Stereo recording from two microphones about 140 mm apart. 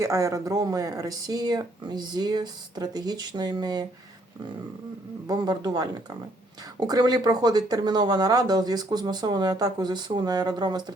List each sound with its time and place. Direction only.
0.0 s speech: 20° right (ahead or behind)
5.3 s speech: 30° right (ahead or behind)